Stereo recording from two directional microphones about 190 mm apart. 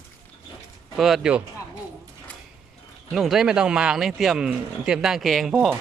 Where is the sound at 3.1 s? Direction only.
Centre (ahead or behind).